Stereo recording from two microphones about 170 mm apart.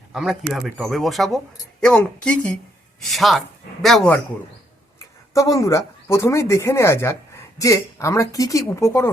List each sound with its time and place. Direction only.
0.1 s speech: centre (ahead or behind)
5.3 s speech: 20° left (ahead or behind)